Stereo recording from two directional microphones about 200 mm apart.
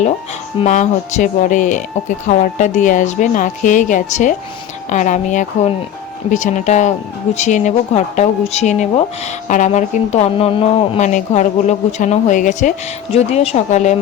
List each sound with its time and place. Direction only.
0.6 s speech: 35° left (ahead or behind)